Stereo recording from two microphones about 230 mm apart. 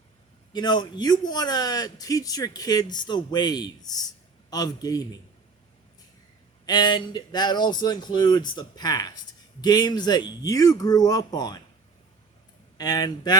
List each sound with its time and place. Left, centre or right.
0.5 s a man's voice: centre
6.7 s a man's voice: centre
12.7 s a man's voice: centre